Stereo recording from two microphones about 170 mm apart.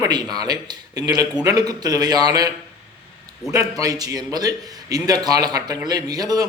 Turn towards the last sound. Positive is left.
turn(degrees=-20)  # may be behind; listen again after turning